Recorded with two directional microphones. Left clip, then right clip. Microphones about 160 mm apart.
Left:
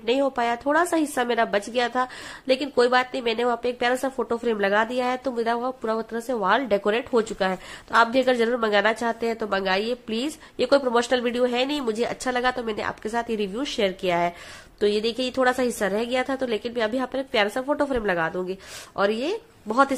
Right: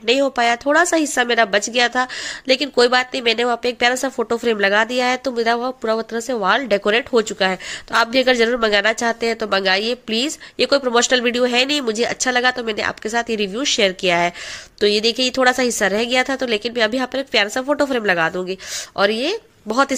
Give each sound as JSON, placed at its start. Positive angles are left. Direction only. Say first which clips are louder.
{"t": 0.0, "sound": "speech", "louder": "right 6 dB", "side_deg": -15}